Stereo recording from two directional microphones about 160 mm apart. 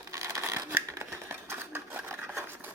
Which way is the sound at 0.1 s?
20° right (ahead or behind).